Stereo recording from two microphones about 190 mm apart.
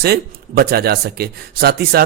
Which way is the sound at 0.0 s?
55° right (ahead or behind).